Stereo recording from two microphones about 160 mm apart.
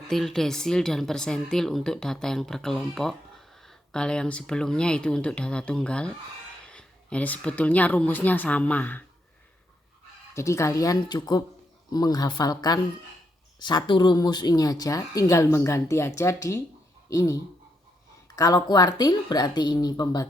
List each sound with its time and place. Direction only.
0.1 s a woman's voice: centre (ahead or behind)
10.3 s speech: 20° left (ahead or behind)
18.3 s speech: 20° left (ahead or behind)